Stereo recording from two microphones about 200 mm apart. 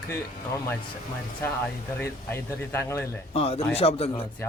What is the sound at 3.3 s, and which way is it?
Speech, 30° left (ahead or behind).